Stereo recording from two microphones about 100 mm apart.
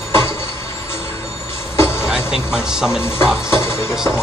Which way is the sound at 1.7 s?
25° left (ahead or behind).